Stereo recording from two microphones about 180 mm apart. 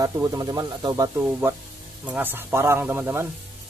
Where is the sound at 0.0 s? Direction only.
20° right (ahead or behind).